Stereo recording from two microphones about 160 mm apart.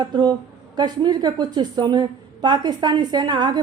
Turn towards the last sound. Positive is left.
turn(degrees=-25)  # may be behind; listen again after turning